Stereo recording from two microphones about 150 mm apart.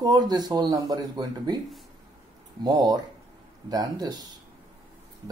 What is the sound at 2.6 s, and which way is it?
Speech, 25° right (ahead or behind).